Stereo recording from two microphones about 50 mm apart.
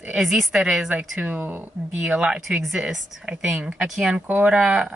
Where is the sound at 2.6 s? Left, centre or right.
Centre.